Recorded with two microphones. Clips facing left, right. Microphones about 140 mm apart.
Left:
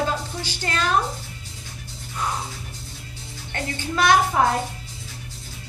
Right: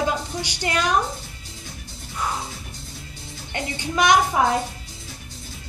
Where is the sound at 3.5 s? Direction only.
15° right (ahead or behind).